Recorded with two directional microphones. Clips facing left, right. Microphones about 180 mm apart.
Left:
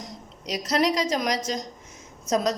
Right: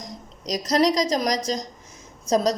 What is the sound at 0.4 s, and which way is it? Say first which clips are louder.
A woman's voice: right 3 dB; 35° right (ahead or behind).